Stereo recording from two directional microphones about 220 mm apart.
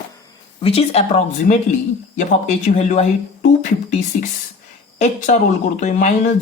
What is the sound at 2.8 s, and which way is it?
Speech, 30° left (ahead or behind).